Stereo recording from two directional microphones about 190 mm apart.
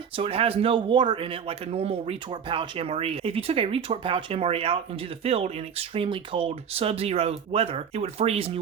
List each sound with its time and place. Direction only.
0.2 s a man's voice: 30° right (ahead or behind)